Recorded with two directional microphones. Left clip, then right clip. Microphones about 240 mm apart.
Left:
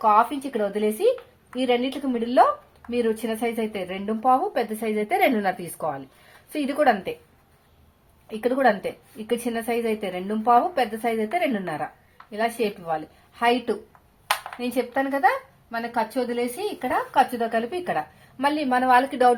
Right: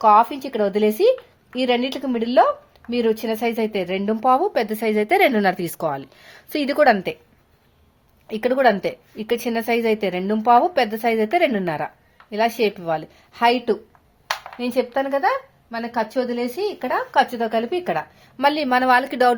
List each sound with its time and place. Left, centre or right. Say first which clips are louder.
0.0 s a woman's voice: right 4 dB; right
8.3 s a woman's voice: right 4 dB; right
14.3 s a sound: left 1 dB; centre
14.6 s speech: right 4 dB; right